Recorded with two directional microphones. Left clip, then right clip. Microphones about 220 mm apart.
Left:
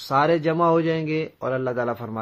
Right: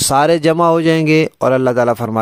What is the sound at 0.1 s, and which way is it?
Speech, 50° right (ahead or behind).